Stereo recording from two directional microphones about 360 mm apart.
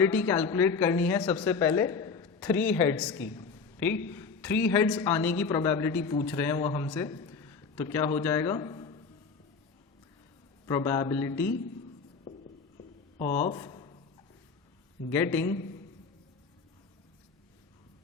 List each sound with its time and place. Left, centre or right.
0.0 s a woman's voice: centre
3.3 s a sound: centre
4.7 s a woman's voice: centre
10.7 s a woman's voice: centre
12.3 s a sound: centre
13.1 s speech: centre
15.1 s a woman's voice: centre